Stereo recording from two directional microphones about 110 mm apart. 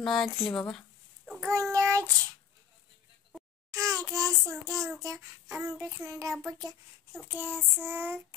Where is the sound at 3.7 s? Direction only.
30° right (ahead or behind).